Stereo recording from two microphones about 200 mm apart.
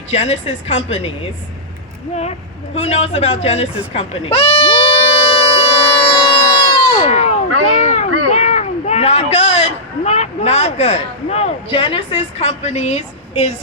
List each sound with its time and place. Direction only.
0.1 s speech: 30° left (ahead or behind)
2.7 s speech: 35° left (ahead or behind)
3.9 s goat: 30° left (ahead or behind)
7.0 s a sound: 35° left (ahead or behind)
7.8 s children playing: 35° left (ahead or behind)
8.3 s a man's voice: 35° left (ahead or behind)